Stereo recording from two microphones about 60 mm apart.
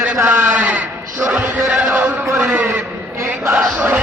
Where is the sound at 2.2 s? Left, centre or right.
Right.